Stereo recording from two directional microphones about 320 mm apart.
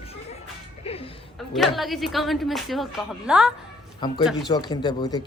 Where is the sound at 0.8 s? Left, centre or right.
Centre.